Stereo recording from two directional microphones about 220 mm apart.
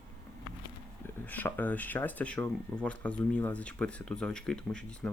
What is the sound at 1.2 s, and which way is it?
Speech, 10° left (ahead or behind).